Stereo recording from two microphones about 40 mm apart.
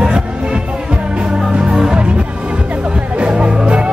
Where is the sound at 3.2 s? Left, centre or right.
Right.